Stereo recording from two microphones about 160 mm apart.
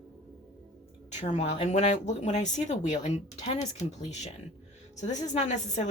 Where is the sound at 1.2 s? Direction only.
45° left (ahead or behind).